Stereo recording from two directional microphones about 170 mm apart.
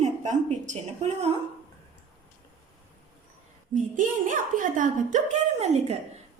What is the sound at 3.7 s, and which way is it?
A woman's voice, 50° right (ahead or behind).